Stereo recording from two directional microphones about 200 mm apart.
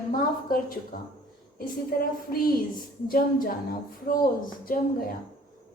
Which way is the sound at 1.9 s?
45° left (ahead or behind).